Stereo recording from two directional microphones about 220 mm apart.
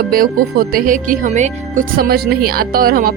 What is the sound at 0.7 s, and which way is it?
Speech, 40° right (ahead or behind).